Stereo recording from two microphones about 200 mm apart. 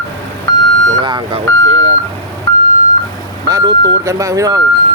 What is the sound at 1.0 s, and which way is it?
Speech, 25° right (ahead or behind).